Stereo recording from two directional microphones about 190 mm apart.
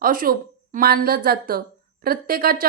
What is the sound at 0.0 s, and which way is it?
Speech, 50° right (ahead or behind).